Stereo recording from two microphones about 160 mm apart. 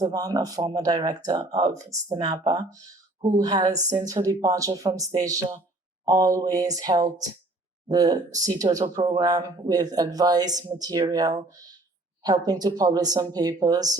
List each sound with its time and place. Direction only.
0.0 s speech: 20° right (ahead or behind)